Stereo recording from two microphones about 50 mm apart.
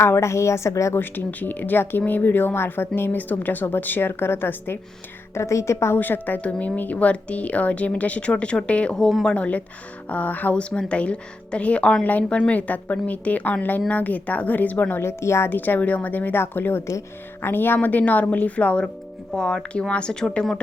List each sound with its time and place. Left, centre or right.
0.0 s a woman's voice: left
1.3 s speech: left
5.3 s a woman's voice: left
6.0 s speech: left
10.5 s speech: centre
12.0 s speech: left
14.9 s speech: left
15.4 s speech: left
17.8 s speech: left
19.3 s speech: centre
19.9 s speech: centre